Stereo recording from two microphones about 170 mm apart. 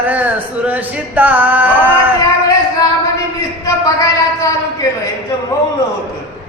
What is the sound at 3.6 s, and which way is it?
Speech, 20° left (ahead or behind).